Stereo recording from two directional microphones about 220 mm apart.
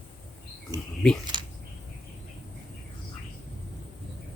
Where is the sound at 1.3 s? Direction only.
20° right (ahead or behind).